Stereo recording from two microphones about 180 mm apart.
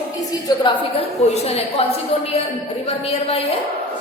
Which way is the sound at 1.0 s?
35° left (ahead or behind).